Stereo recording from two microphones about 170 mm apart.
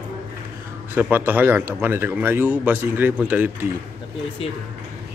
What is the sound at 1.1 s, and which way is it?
A man's voice, 10° right (ahead or behind).